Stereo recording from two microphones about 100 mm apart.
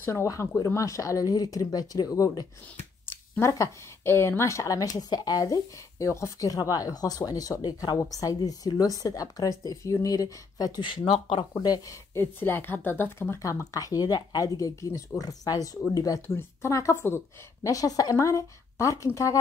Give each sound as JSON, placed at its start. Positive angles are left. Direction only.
{"t": 0.0, "sound": "speech", "side_deg": 25}
{"t": 10.8, "sound": "speech", "side_deg": 55}
{"t": 11.5, "sound": "speech", "side_deg": 35}
{"t": 17.6, "sound": "speech", "side_deg": 35}